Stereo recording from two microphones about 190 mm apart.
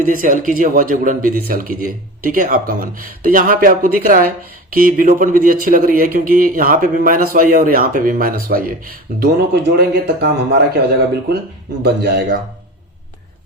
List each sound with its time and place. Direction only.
0.0 s a man's voice: 45° right (ahead or behind)